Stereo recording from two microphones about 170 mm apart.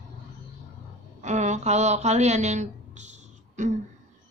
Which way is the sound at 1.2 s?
45° right (ahead or behind).